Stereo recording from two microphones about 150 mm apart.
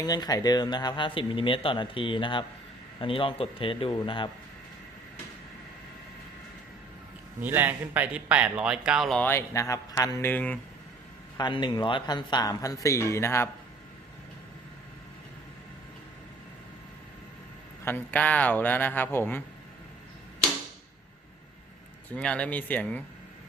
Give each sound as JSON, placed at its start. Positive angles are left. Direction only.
{"t": 0.0, "sound": "speech", "side_deg": 25}
{"t": 7.4, "sound": "speech", "side_deg": -15}
{"t": 9.1, "sound": "a man's voice", "side_deg": 15}
{"t": 11.3, "sound": "a man's voice", "side_deg": 30}
{"t": 17.8, "sound": "a man's voice", "side_deg": 10}
{"t": 22.1, "sound": "a man's voice", "side_deg": 5}